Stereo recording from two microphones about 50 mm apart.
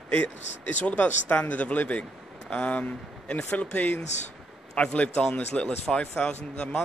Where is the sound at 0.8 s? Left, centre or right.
Left.